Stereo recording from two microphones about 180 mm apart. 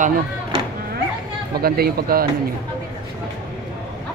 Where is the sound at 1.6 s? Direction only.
55° right (ahead or behind).